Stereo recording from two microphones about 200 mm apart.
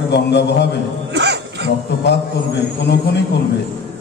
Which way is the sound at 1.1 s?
60° right (ahead or behind).